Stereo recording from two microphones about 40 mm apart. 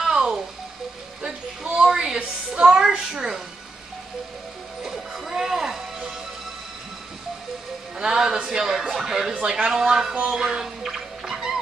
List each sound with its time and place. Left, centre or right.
0.0 s music: centre
1.2 s a sound: centre
2.5 s music: centre
4.8 s music: centre
8.0 s a sound: centre
9.3 s speech: right
9.7 s speech: centre
10.6 s music: centre